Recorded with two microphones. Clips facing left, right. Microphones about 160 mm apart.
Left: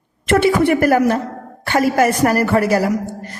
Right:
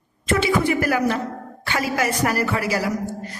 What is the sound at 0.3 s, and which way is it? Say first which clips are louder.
A woman's voice: left 6 dB; 60° left (ahead or behind).